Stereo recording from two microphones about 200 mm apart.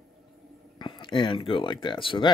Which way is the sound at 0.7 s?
25° left (ahead or behind).